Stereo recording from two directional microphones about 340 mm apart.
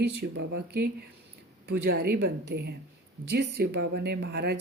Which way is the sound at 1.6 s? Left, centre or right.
Right.